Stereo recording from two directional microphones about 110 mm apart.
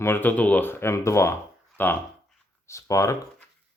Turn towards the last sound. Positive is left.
turn(degrees=30)  # may be behind; listen again after turning